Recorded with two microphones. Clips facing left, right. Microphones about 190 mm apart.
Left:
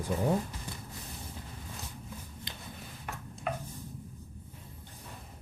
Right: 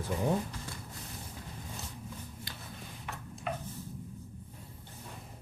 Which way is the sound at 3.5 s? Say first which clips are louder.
Left 2 dB; 50° left (ahead or behind).